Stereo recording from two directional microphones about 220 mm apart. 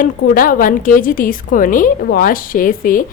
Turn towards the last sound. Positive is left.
turn(degrees=40)  # may be behind; listen again after turning